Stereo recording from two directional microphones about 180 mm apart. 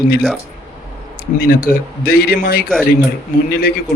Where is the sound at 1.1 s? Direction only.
55° left (ahead or behind).